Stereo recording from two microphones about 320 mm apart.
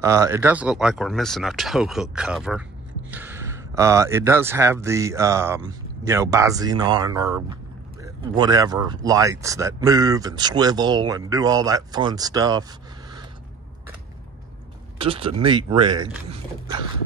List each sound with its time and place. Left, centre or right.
0.0 s speech: centre
15.0 s speech: centre